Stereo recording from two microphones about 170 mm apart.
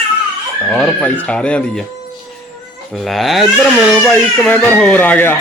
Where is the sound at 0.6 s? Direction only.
5° left (ahead or behind).